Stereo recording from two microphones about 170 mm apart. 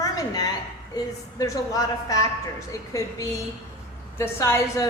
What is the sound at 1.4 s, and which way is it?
Speech, 20° left (ahead or behind).